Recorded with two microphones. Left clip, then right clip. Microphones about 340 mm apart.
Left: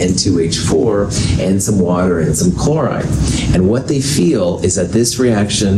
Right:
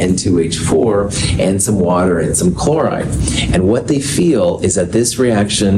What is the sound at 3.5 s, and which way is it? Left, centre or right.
Speech, right.